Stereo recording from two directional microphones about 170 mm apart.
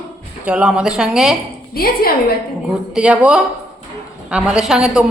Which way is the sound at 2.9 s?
5° right (ahead or behind).